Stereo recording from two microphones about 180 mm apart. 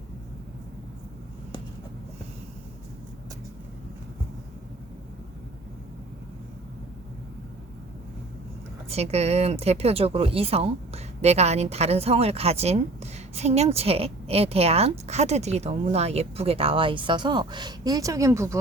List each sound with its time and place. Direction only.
8.9 s speech: 35° right (ahead or behind); by 18.5 s 15° right (ahead or behind)